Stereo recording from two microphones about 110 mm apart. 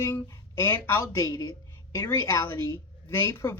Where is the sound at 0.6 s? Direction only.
25° left (ahead or behind).